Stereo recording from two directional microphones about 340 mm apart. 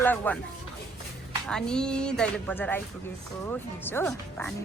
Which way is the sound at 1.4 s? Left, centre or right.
Centre.